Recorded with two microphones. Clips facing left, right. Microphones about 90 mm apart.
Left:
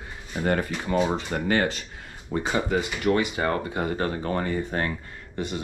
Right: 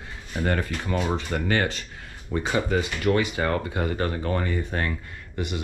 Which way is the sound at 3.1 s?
25° left (ahead or behind).